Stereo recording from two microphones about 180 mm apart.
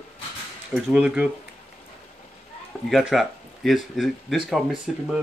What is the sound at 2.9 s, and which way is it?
Speech, centre (ahead or behind).